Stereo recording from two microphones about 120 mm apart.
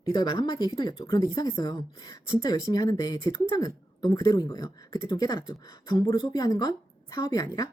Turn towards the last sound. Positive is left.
turn(degrees=30)  # may be behind; listen again after turning